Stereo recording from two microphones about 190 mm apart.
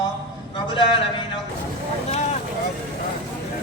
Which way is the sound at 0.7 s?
25° left (ahead or behind).